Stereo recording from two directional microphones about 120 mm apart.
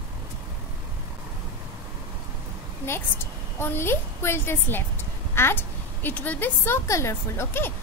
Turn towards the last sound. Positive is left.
turn(degrees=20)  # may be behind; listen again after turning